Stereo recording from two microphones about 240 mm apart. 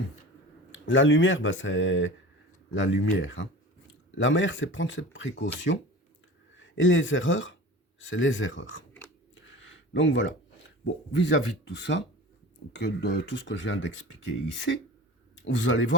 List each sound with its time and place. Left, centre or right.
0.7 s speech: left
9.3 s a sound: left
10.8 s speech: left